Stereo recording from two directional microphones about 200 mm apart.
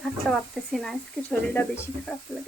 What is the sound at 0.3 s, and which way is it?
Speech, centre (ahead or behind).